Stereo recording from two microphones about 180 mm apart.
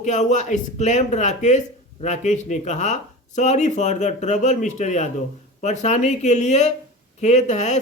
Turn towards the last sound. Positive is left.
turn(degrees=40)  # may be behind; listen again after turning